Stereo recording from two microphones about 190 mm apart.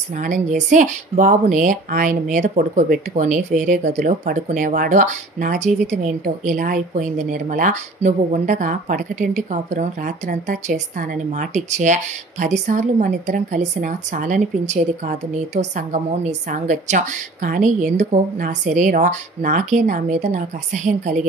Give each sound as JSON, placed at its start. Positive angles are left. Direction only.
{"t": 0.2, "sound": "a woman's voice", "side_deg": -40}